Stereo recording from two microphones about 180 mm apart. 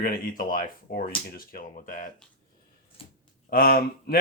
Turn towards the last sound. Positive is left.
turn(degrees=55)  # may be behind; listen again after turning